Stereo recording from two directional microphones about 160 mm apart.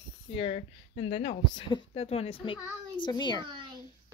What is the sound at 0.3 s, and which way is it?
Speech, 35° left (ahead or behind).